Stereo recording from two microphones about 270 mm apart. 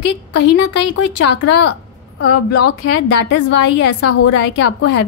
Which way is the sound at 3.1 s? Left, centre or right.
Left.